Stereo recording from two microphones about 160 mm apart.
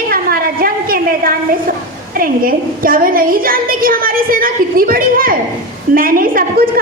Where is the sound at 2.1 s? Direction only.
65° right (ahead or behind).